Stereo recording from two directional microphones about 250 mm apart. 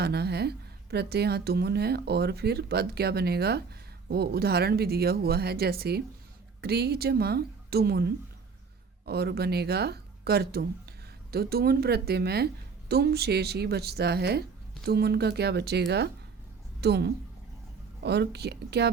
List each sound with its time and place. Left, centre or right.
0.0 s a woman's voice: right